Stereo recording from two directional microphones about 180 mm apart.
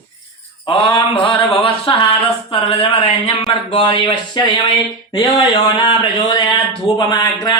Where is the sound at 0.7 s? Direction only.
25° left (ahead or behind).